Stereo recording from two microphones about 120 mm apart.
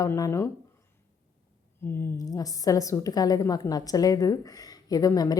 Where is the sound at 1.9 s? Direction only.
20° left (ahead or behind).